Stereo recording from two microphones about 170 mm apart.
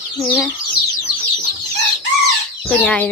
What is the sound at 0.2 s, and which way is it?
Speech, 5° left (ahead or behind).